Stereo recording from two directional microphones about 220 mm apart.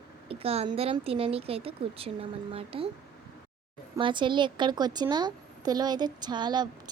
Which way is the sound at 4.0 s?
20° right (ahead or behind).